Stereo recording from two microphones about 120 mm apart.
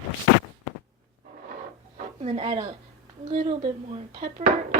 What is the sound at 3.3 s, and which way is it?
Speech, 90° right.